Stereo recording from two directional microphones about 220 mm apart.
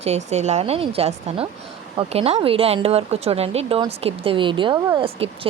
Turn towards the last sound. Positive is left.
turn(degrees=-25)  # may be behind; listen again after turning